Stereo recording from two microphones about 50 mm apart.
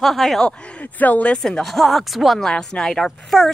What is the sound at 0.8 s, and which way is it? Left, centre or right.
Speech, left.